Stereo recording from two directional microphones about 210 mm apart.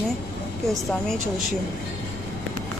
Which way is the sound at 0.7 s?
Centre (ahead or behind).